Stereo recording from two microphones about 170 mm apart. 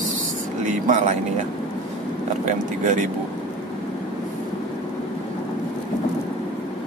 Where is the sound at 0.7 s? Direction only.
45° right (ahead or behind).